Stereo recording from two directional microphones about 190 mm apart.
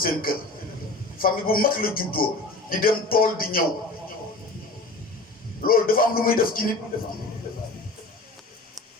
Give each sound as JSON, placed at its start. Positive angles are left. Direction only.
{"t": 0.0, "sound": "a man's voice", "side_deg": 50}
{"t": 5.6, "sound": "a man's voice", "side_deg": 50}